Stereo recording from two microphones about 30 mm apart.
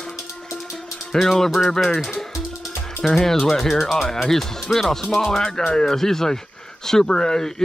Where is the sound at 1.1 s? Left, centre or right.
Centre.